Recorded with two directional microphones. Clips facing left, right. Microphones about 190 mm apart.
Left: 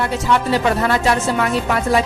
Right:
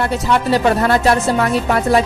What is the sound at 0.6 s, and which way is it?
A woman's voice, 40° right (ahead or behind).